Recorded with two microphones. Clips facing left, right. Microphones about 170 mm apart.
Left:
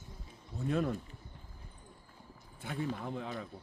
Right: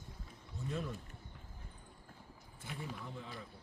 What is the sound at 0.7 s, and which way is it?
Speech, 65° left (ahead or behind).